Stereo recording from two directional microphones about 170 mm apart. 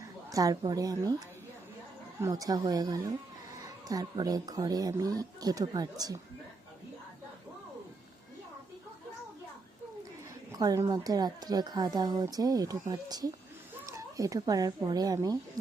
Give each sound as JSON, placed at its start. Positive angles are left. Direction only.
{"t": 0.0, "sound": "a woman's voice", "side_deg": -20}
{"t": 2.2, "sound": "a woman's voice", "side_deg": -20}
{"t": 10.5, "sound": "a woman's voice", "side_deg": -20}